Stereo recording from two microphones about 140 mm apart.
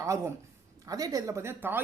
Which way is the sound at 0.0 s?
20° right (ahead or behind).